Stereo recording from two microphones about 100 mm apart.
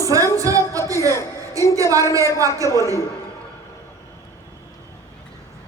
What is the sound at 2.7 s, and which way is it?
Speech, 30° right (ahead or behind).